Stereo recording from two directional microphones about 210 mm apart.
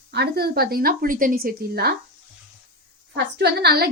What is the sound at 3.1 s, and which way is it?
Speech, 50° right (ahead or behind).